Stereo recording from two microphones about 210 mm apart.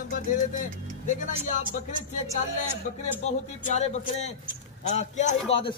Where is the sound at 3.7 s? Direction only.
30° left (ahead or behind).